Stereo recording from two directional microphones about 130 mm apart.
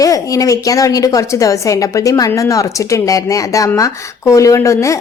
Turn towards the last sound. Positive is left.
turn(degrees=25)  # may be behind; listen again after turning